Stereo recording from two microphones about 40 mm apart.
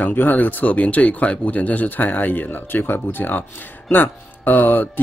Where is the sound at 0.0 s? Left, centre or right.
Left.